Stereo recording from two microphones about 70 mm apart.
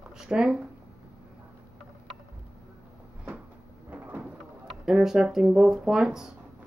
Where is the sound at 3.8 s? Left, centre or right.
Right.